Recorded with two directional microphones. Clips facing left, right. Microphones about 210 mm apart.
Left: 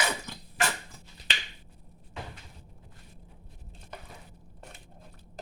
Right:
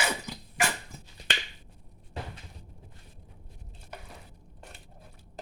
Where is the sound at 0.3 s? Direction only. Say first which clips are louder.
Right 1 dB; 10° right (ahead or behind).